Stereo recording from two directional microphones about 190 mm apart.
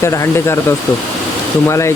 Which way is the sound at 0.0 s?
15° left (ahead or behind).